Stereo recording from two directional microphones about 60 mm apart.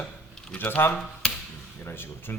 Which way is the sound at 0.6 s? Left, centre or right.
Left.